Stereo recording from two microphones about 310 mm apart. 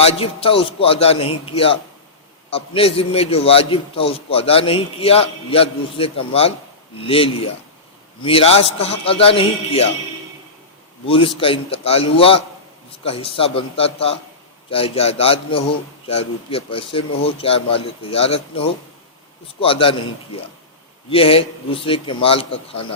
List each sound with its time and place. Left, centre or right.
0.0 s a man's voice: centre
11.0 s a man's voice: centre
19.5 s a man's voice: centre